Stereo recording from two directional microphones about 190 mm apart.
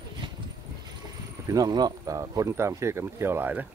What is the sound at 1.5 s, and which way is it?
Speech, 20° right (ahead or behind).